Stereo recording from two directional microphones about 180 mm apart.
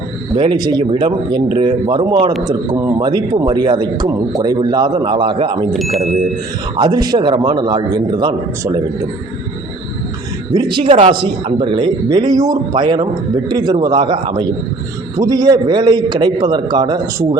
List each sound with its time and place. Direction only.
0.3 s a man's voice: 25° right (ahead or behind)
5.7 s speech: centre (ahead or behind)
6.7 s a man's voice: 25° right (ahead or behind)
10.5 s a man's voice: 25° right (ahead or behind)